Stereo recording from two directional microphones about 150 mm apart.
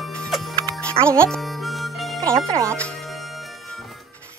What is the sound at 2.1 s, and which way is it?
Speech, 20° right (ahead or behind).